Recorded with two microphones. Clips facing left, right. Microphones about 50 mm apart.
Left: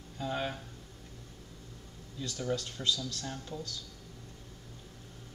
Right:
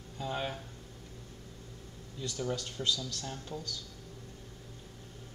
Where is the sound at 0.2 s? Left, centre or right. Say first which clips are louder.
Left 1 dB; centre.